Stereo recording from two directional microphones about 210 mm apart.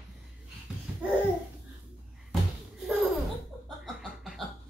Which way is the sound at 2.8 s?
Centre (ahead or behind).